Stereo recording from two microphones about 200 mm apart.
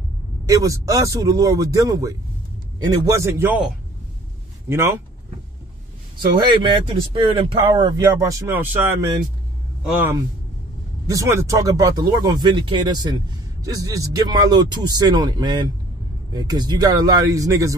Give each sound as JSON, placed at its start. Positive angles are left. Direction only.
{"t": 0.5, "sound": "speech", "side_deg": -15}
{"t": 6.4, "sound": "speech", "side_deg": -25}